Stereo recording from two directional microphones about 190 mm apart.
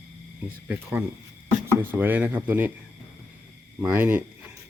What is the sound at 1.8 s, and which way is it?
Speech, 10° right (ahead or behind).